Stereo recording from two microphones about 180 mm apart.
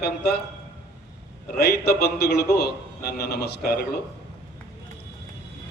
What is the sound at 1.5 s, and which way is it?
A man's voice, 60° left (ahead or behind).